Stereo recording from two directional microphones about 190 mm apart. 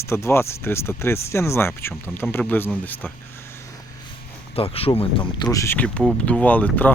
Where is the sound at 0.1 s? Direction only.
15° left (ahead or behind).